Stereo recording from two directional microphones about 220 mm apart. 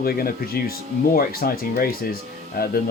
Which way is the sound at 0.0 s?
45° left (ahead or behind).